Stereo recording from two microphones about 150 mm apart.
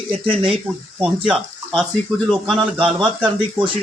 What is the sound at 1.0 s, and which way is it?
Speech, 10° right (ahead or behind).